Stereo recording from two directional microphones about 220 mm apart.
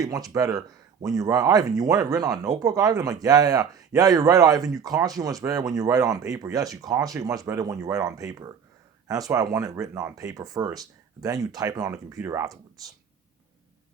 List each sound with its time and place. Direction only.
0.0 s speech: 15° right (ahead or behind)